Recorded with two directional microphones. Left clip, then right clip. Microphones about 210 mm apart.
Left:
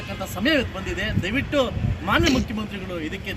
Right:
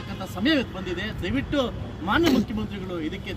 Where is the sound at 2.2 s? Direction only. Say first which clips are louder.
Right 3 dB; 35° right (ahead or behind).